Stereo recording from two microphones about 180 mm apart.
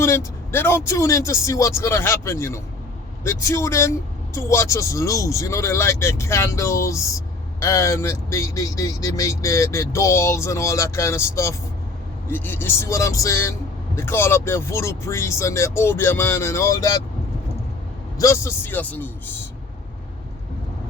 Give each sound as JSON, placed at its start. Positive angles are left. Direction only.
{"t": 0.0, "sound": "speech", "side_deg": 15}
{"t": 18.2, "sound": "speech", "side_deg": 15}